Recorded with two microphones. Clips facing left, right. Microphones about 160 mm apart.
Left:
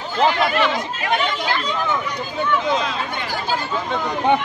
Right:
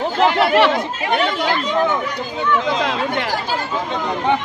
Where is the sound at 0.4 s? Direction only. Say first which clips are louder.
Right 5 dB; 70° right (ahead or behind).